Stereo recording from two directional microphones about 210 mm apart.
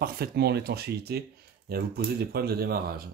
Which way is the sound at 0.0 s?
45° right (ahead or behind).